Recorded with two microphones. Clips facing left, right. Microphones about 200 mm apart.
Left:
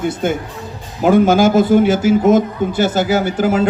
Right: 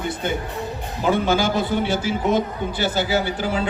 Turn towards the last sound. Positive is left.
turn(degrees=45)  # may be behind; listen again after turning